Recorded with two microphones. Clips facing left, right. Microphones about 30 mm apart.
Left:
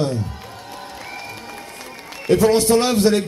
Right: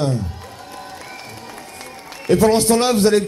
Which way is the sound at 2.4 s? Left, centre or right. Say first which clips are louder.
Right 1 dB; centre.